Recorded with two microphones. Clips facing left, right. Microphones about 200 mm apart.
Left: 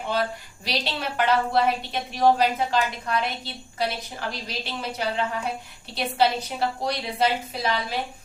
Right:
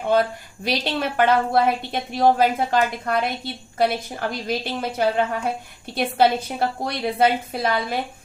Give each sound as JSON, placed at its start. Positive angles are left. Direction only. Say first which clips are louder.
{"t": 0.6, "sound": "a woman's voice", "louder": "right 6 dB", "side_deg": -50}